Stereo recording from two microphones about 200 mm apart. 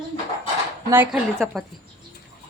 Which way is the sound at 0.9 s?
10° right (ahead or behind).